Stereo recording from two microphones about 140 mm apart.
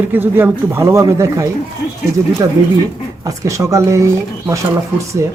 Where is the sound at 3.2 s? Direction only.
20° right (ahead or behind).